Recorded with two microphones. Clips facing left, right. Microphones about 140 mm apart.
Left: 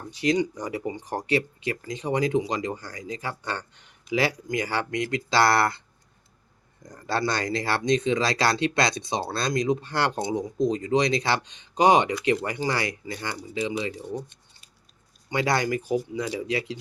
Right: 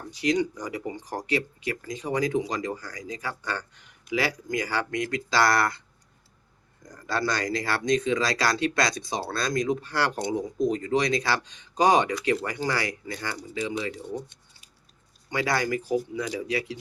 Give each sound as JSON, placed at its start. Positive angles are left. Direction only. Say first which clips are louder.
{"t": 0.1, "sound": "speech", "louder": "left 1 dB", "side_deg": 25}
{"t": 6.8, "sound": "speech", "louder": "left 1 dB", "side_deg": 30}
{"t": 15.3, "sound": "speech", "louder": "left 2 dB", "side_deg": 25}